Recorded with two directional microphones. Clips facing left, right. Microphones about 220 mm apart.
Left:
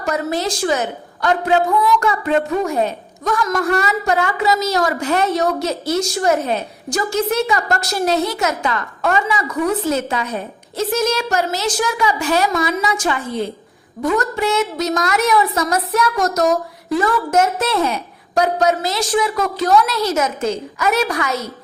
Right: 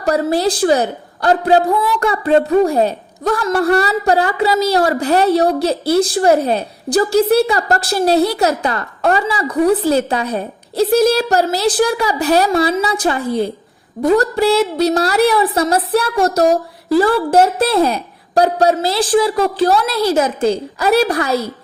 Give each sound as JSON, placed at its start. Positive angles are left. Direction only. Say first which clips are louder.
{"t": 0.0, "sound": "a woman's voice", "louder": "right 5 dB", "side_deg": -35}